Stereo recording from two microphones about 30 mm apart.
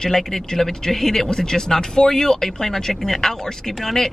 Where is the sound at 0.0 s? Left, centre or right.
Centre.